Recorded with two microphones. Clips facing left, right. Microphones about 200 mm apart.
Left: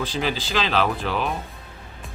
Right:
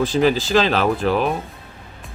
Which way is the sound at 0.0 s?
45° right (ahead or behind).